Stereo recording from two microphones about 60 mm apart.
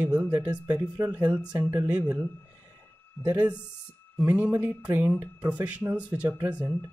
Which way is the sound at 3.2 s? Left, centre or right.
Right.